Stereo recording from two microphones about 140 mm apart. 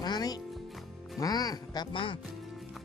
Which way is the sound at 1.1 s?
25° left (ahead or behind).